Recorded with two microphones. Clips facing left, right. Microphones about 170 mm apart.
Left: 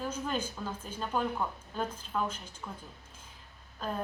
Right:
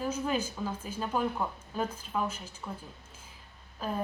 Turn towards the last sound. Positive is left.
turn(degrees=-5)  # may be behind; listen again after turning